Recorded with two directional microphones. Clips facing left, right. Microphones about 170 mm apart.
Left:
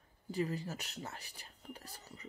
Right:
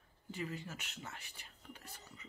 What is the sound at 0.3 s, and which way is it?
Speech, 35° left (ahead or behind).